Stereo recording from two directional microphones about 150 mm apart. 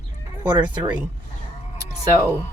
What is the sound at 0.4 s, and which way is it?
Speech, 30° right (ahead or behind).